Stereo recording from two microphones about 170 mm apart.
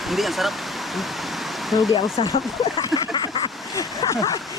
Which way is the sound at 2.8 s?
25° left (ahead or behind).